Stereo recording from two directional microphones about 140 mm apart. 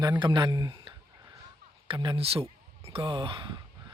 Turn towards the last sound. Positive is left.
turn(degrees=-35)  # may be behind; listen again after turning